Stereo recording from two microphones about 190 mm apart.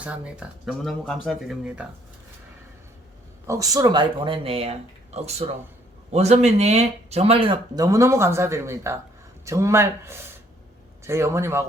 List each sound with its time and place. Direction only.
0.0 s speech: 5° right (ahead or behind)
3.4 s speech: 15° right (ahead or behind)